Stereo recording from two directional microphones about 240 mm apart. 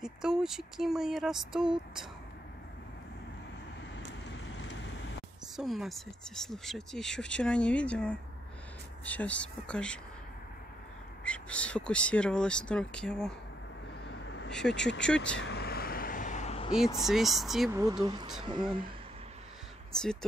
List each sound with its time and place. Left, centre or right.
0.0 s speech: centre
4.6 s vehicle: left
5.6 s speech: centre
11.2 s speech: centre
14.6 s speech: centre
15.3 s vehicle: left
17.0 s speech: centre
18.0 s speech: centre
20.0 s speech: centre